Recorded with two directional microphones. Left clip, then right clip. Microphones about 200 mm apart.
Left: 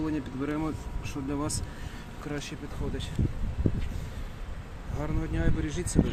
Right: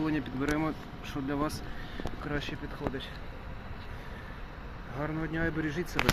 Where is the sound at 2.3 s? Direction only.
15° left (ahead or behind).